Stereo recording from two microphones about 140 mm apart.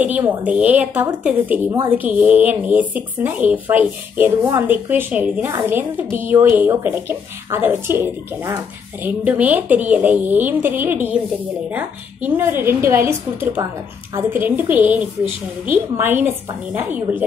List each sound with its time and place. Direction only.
0.0 s speech: 15° right (ahead or behind)